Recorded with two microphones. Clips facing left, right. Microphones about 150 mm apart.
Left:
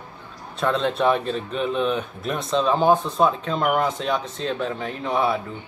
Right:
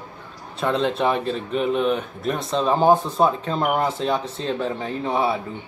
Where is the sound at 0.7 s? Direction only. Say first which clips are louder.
Right 1 dB; 20° right (ahead or behind).